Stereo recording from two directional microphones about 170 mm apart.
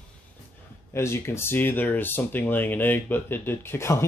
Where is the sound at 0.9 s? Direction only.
15° left (ahead or behind).